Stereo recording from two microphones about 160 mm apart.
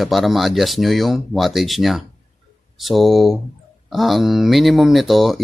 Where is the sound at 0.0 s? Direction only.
Centre (ahead or behind).